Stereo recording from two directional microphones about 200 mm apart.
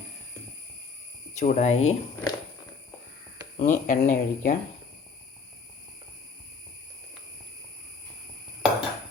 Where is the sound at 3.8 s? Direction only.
45° left (ahead or behind).